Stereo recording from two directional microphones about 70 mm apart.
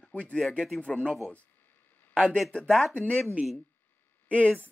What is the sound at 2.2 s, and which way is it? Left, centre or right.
Speech, centre.